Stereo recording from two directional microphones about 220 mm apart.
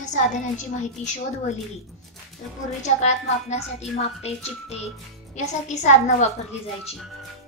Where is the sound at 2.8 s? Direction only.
30° left (ahead or behind).